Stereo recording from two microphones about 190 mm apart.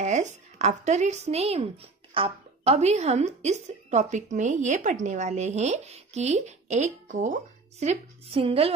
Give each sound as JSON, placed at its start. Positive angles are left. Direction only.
{"t": 0.0, "sound": "speech", "side_deg": -40}